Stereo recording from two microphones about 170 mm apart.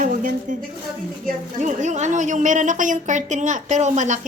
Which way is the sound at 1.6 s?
45° right (ahead or behind).